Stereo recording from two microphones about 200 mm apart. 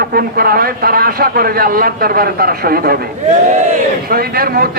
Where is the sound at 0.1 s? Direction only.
50° right (ahead or behind).